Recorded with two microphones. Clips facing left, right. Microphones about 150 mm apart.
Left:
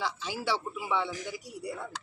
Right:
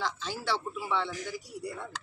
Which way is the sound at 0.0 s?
10° left (ahead or behind).